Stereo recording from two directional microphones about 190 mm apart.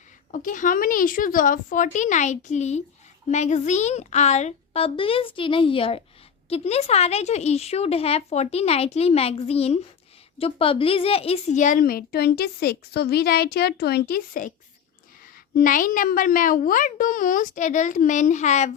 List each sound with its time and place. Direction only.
0.3 s a woman's voice: 45° left (ahead or behind)
15.5 s a woman's voice: 45° left (ahead or behind)